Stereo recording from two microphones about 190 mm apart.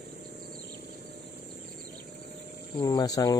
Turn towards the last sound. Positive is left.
turn(degrees=20)  # may be behind; listen again after turning